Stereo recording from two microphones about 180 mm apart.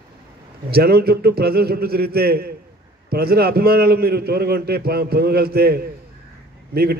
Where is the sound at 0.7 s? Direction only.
60° right (ahead or behind).